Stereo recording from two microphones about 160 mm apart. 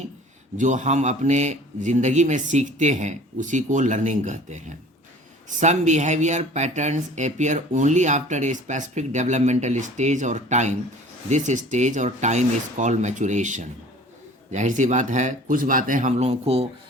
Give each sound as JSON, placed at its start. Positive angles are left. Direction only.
{"t": 0.5, "sound": "speech", "side_deg": -50}